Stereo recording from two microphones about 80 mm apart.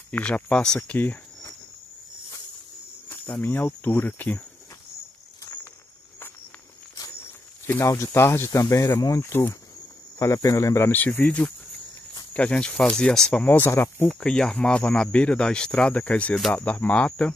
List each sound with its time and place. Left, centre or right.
0.1 s speech: centre
0.7 s speech: left
3.1 s speech: left
7.8 s speech: left
8.1 s speech: left
8.5 s speech: left
9.2 s speech: left
10.1 s speech: left
10.9 s speech: left; by 13.3 s centre
13.3 s speech: left
14.2 s speech: centre